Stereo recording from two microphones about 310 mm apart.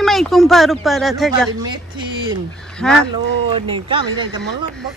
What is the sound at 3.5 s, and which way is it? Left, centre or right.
Speech, centre.